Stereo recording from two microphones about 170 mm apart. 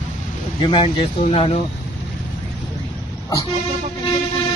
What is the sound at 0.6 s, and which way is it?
Speech, 30° left (ahead or behind).